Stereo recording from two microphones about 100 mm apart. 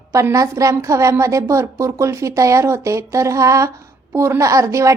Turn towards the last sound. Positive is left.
turn(degrees=-30)  # may be behind; listen again after turning